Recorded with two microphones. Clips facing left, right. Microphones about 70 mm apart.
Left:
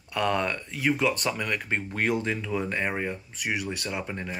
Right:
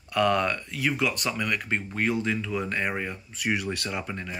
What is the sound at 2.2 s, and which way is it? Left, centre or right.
Speech, left.